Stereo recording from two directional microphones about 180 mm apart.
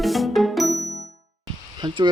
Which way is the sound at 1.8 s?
25° right (ahead or behind).